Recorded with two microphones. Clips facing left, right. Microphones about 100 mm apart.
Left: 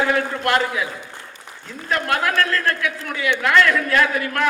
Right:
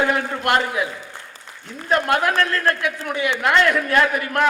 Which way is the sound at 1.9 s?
25° right (ahead or behind).